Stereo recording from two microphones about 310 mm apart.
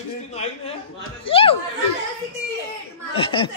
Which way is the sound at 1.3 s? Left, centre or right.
Centre.